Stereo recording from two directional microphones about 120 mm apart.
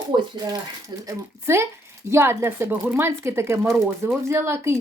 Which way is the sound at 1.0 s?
20° right (ahead or behind).